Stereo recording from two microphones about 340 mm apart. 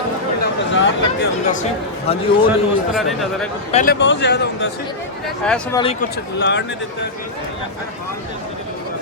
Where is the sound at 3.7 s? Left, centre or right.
Left.